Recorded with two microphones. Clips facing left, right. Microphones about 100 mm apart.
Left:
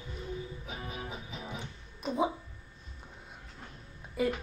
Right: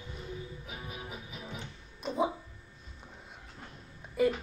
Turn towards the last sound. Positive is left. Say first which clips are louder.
# right 3 dB
turn(degrees=0)  # may be behind; listen again after turning